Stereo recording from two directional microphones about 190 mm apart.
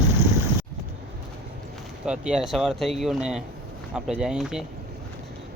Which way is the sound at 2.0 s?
5° right (ahead or behind).